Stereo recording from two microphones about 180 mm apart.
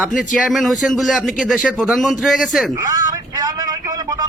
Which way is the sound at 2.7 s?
20° right (ahead or behind).